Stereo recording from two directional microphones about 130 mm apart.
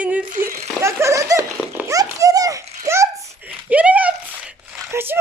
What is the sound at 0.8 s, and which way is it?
Laughter, 20° right (ahead or behind).